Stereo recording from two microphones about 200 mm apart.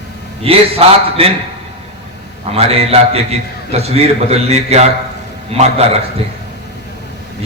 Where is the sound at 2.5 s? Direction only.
30° right (ahead or behind).